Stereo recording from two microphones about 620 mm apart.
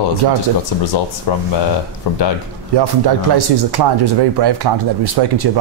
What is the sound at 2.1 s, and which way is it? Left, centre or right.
Speech, left.